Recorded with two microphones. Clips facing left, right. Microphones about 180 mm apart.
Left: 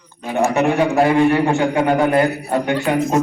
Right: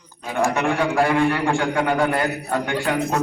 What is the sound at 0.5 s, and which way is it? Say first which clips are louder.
A man's voice: left 6 dB; 20° left (ahead or behind).